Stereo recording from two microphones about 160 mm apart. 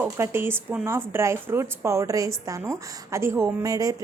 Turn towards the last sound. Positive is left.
turn(degrees=-20)  # may be behind; listen again after turning